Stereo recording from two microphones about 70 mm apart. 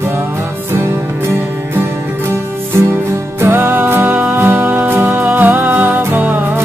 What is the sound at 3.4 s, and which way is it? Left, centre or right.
Music, right.